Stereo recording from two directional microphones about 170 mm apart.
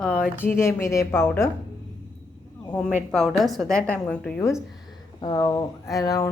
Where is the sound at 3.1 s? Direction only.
Centre (ahead or behind).